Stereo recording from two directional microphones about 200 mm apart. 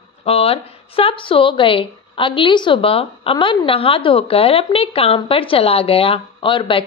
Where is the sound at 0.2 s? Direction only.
30° left (ahead or behind).